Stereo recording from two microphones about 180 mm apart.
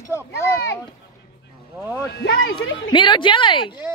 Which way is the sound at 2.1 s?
75° left (ahead or behind).